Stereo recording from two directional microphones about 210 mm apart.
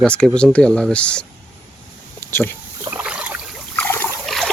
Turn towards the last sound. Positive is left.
turn(degrees=10)  # may be behind; listen again after turning